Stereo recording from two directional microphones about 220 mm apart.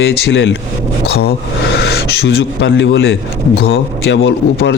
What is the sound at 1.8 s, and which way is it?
A man's voice, 50° left (ahead or behind).